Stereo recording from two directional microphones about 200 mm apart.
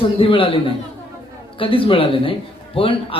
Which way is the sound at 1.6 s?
25° left (ahead or behind).